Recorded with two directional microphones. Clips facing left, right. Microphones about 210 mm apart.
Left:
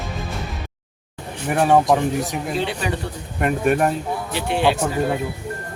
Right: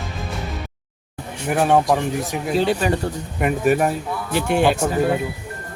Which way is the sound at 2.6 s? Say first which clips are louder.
Right 7 dB; 40° right (ahead or behind).